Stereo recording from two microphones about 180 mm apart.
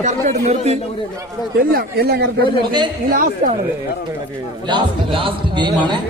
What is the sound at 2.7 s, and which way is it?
Speech, 25° right (ahead or behind).